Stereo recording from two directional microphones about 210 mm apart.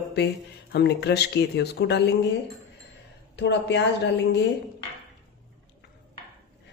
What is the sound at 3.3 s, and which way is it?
Speech, 55° left (ahead or behind).